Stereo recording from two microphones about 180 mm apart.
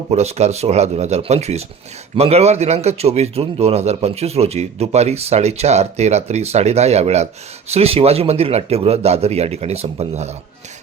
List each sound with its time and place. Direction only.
0.1 s a man's voice: 35° right (ahead or behind)